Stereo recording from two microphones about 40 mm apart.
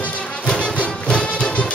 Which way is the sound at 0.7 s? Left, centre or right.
Left.